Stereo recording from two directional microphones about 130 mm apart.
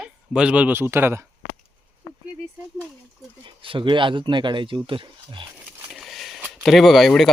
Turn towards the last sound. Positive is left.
turn(degrees=0)  # may be behind; listen again after turning